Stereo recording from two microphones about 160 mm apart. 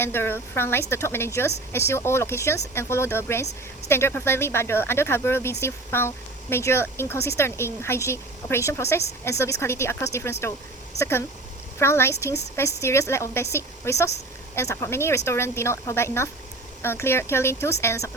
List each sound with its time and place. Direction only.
0.0 s speech: 15° left (ahead or behind)